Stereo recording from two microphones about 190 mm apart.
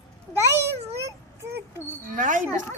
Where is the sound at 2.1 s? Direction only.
40° right (ahead or behind).